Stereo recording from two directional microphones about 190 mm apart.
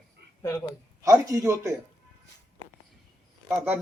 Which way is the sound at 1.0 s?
15° right (ahead or behind).